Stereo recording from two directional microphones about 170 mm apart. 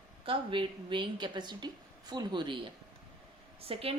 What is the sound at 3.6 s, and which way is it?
Speech, 35° right (ahead or behind).